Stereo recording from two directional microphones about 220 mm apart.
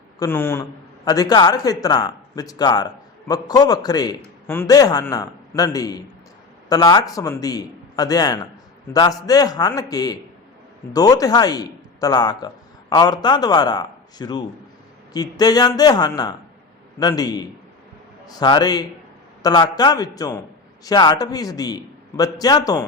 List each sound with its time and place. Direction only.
0.2 s a man's voice: 10° left (ahead or behind)